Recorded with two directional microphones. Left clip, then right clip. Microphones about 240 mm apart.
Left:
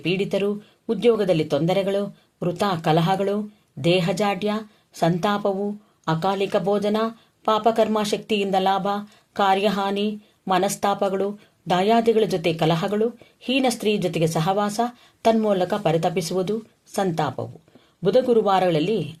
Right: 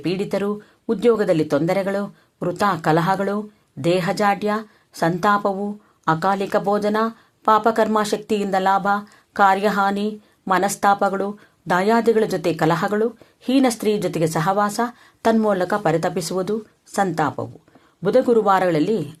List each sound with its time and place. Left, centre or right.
0.0 s speech: right